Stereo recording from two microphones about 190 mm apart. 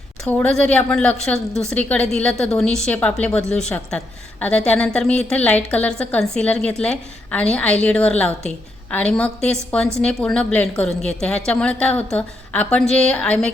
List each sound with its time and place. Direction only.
0.3 s a woman's voice: 5° left (ahead or behind)